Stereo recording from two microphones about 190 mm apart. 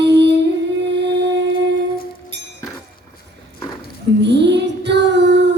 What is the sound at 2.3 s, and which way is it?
Music, 65° right (ahead or behind).